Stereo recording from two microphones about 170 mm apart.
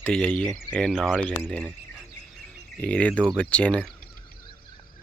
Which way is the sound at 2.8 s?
5° left (ahead or behind).